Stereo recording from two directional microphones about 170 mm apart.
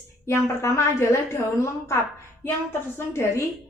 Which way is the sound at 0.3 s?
15° left (ahead or behind).